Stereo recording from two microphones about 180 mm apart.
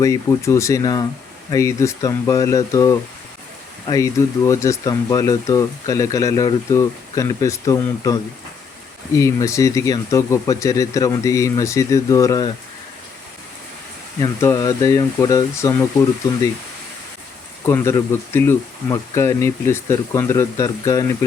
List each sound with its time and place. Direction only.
0.0 s speech: 15° left (ahead or behind)
14.2 s speech: 20° left (ahead or behind)
17.7 s speech: 15° left (ahead or behind)